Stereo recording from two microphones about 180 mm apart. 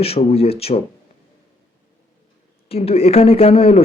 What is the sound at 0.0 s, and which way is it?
Speech, 35° left (ahead or behind).